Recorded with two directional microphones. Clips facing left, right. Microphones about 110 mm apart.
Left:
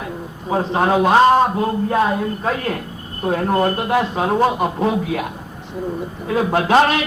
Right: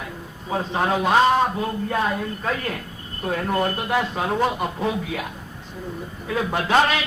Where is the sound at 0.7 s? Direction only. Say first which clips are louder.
Left 5 dB; 35° left (ahead or behind).